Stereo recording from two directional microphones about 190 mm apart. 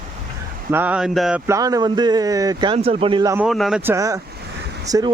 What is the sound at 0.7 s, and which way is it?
Speech, 10° right (ahead or behind).